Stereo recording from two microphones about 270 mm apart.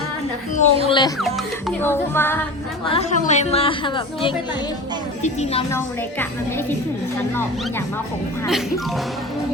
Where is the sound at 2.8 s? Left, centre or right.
Left.